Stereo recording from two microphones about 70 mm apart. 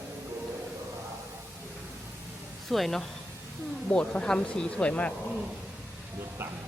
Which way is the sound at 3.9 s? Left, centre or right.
Centre.